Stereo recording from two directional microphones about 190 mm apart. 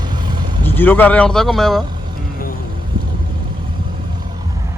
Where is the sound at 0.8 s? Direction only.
10° left (ahead or behind).